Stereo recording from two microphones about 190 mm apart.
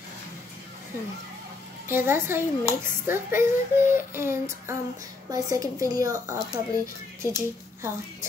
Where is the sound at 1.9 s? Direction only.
10° right (ahead or behind).